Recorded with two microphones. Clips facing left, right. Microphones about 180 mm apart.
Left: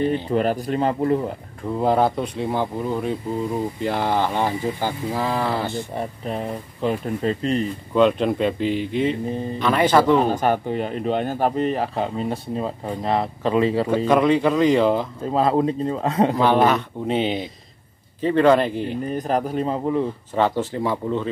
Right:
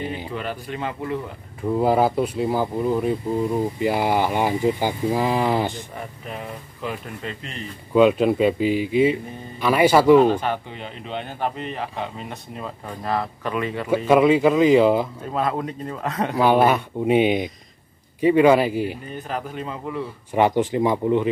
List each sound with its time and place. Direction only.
0.3 s speech: 40° left (ahead or behind)
1.6 s speech: 5° right (ahead or behind)
5.9 s speech: 35° left (ahead or behind)
7.9 s speech: 5° right (ahead or behind)
10.3 s speech: 45° left (ahead or behind); by 13.8 s 30° left (ahead or behind)
13.8 s speech: 10° right (ahead or behind)
15.2 s a man's voice: 30° left (ahead or behind)
16.3 s speech: 10° right (ahead or behind)
19.1 s speech: 40° left (ahead or behind)
20.3 s speech: 15° right (ahead or behind)